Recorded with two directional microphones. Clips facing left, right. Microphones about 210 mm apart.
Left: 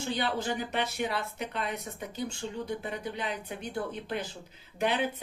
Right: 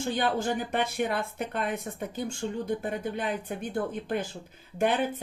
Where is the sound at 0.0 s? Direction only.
50° right (ahead or behind).